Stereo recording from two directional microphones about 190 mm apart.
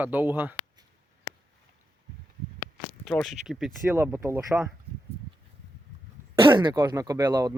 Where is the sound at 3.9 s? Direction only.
10° right (ahead or behind).